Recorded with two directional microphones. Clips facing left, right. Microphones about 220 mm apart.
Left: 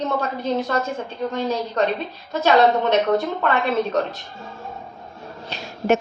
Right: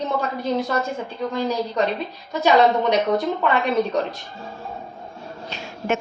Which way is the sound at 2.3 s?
15° right (ahead or behind).